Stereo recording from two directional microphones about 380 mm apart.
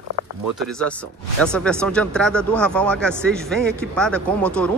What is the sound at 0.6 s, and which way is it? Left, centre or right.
Speech, centre.